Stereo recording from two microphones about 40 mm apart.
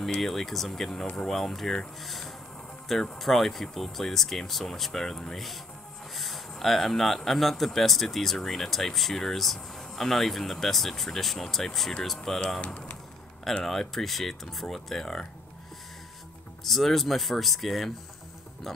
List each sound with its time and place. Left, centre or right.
0.2 s speech: centre
12.5 s speech: left
13.7 s speech: centre
16.6 s speech: centre